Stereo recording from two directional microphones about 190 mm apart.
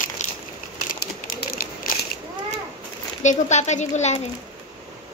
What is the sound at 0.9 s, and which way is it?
Pigeon, 45° left (ahead or behind).